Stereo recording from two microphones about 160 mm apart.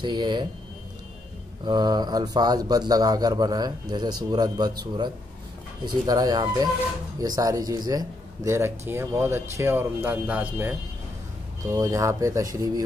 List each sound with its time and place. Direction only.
0.0 s speech: 25° right (ahead or behind)
1.6 s a man's voice: 25° right (ahead or behind)